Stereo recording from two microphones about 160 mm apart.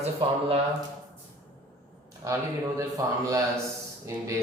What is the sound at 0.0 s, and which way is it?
Speech, 40° right (ahead or behind).